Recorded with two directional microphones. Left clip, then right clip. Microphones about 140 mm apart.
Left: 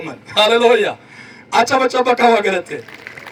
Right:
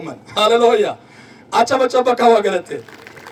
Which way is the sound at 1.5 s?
55° left (ahead or behind).